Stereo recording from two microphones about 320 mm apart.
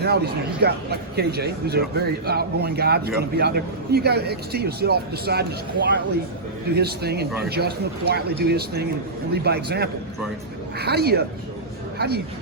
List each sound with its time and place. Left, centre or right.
0.0 s a man's voice: right